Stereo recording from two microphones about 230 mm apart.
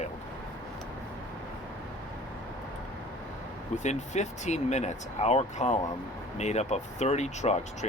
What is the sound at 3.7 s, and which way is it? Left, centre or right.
Speech, left.